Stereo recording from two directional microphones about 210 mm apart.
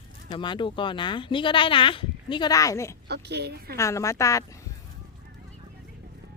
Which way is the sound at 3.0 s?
50° right (ahead or behind).